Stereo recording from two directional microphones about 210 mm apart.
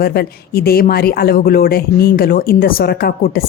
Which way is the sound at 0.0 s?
45° left (ahead or behind).